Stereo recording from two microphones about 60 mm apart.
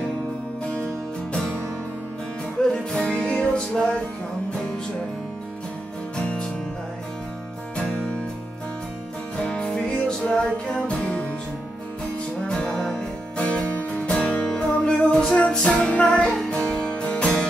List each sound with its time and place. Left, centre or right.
2.7 s music: centre
7.7 s music: centre
9.4 s music: centre
12.4 s music: centre